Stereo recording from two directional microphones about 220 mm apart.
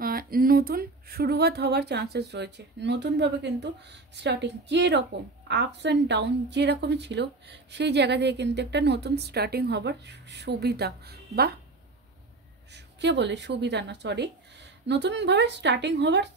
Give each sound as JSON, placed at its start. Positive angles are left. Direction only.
{"t": 0.0, "sound": "a woman's voice", "side_deg": -40}
{"t": 12.7, "sound": "a woman's voice", "side_deg": -55}